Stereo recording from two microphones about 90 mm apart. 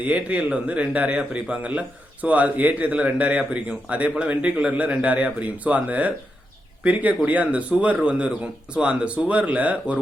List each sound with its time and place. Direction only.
0.0 s speech: 15° right (ahead or behind)